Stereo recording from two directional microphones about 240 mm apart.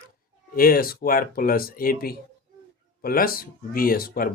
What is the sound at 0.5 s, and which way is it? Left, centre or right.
Speech, left.